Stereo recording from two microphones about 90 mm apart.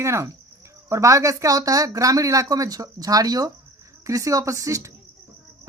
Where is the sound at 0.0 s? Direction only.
30° right (ahead or behind).